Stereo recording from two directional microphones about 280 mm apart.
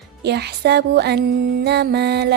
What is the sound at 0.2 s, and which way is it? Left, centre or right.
Music, right.